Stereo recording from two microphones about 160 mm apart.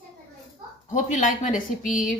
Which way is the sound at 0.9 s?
50° left (ahead or behind).